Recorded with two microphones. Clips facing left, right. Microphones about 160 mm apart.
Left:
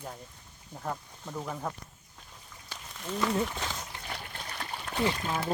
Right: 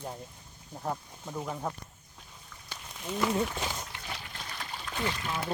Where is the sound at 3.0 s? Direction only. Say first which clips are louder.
Even; 5° right (ahead or behind).